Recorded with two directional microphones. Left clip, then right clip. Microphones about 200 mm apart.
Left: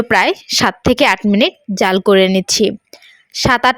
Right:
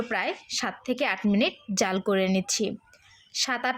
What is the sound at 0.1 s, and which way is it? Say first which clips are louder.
A woman's voice: left 19 dB; 45° left (ahead or behind).